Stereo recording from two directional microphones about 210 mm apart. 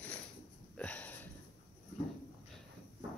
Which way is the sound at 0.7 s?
5° left (ahead or behind).